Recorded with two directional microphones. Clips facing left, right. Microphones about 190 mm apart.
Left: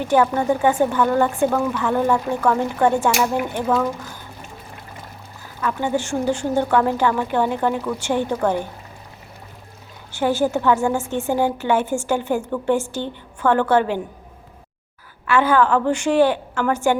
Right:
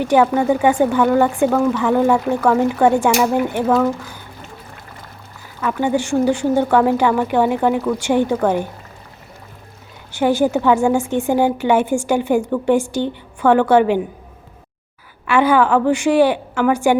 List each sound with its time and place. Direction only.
0.0 s a woman's voice: 15° right (ahead or behind)
5.6 s a woman's voice: 15° right (ahead or behind)
10.1 s a woman's voice: 15° right (ahead or behind)
15.3 s a woman's voice: 15° right (ahead or behind)